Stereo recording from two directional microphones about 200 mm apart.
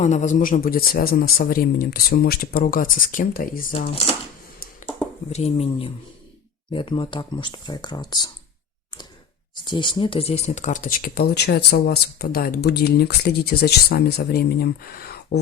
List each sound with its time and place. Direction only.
0.0 s speech: 35° left (ahead or behind)
3.8 s speech: 30° left (ahead or behind)
5.3 s speech: 30° left (ahead or behind)
9.6 s speech: 25° left (ahead or behind); by 15.4 s 50° left (ahead or behind)